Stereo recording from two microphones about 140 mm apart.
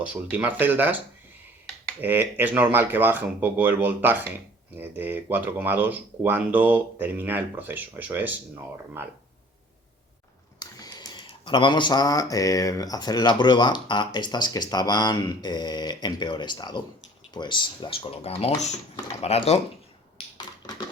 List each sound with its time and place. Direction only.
0.0 s speech: 10° right (ahead or behind)
10.6 s speech: 25° left (ahead or behind); by 19.5 s 50° left (ahead or behind)